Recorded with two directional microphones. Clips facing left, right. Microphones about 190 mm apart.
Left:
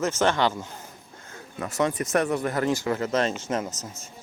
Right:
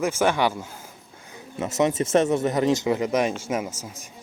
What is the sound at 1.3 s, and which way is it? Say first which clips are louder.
Speech: right 4 dB; 20° right (ahead or behind).